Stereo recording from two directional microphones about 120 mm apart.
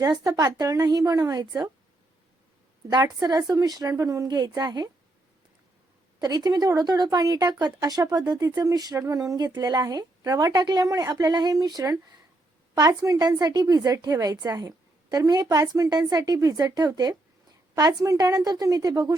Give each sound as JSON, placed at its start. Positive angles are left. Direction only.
{"t": 0.0, "sound": "speech", "side_deg": -30}
{"t": 2.9, "sound": "speech", "side_deg": -35}
{"t": 6.1, "sound": "speech", "side_deg": -35}